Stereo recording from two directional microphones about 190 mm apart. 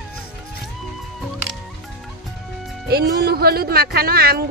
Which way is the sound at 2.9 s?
55° right (ahead or behind).